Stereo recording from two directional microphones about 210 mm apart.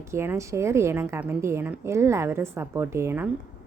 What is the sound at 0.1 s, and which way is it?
A woman's voice, 15° right (ahead or behind).